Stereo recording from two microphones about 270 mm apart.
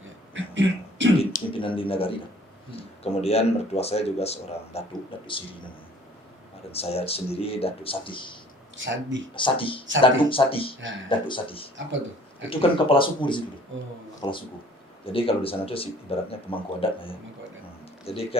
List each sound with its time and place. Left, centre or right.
0.3 s a sound: right
1.2 s a sound: centre
3.0 s speech: left
6.7 s speech: left
8.7 s speech: right
9.3 s speech: centre
10.8 s speech: right
11.3 s speech: centre